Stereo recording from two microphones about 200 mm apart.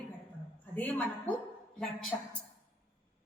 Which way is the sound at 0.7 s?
10° left (ahead or behind).